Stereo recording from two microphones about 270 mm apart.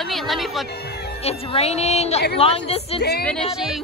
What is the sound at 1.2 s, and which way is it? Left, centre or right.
A woman's voice, left.